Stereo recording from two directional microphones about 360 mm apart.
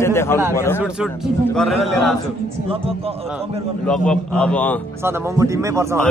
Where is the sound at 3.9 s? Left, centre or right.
Centre.